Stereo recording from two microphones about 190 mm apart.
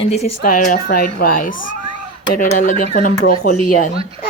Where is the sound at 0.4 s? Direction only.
45° left (ahead or behind).